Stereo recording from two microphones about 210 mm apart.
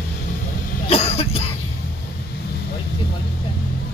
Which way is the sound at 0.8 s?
30° left (ahead or behind).